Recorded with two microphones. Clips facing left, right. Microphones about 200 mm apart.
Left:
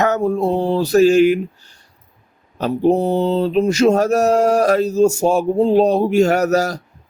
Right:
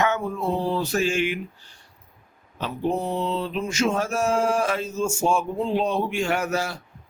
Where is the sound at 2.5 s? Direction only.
40° left (ahead or behind).